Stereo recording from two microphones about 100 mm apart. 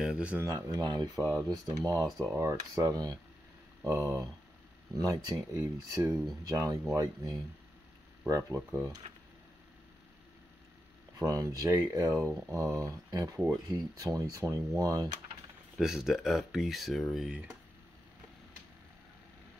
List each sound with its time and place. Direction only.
0.0 s speech: 10° right (ahead or behind)
0.4 s speech: 30° right (ahead or behind)
2.2 s speech: 25° right (ahead or behind)
8.5 s speech: 20° right (ahead or behind)
11.1 s speech: 35° right (ahead or behind)
15.8 s speech: 5° right (ahead or behind)